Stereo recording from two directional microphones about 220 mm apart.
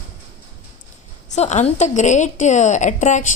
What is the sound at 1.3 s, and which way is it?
A woman's voice, 30° left (ahead or behind).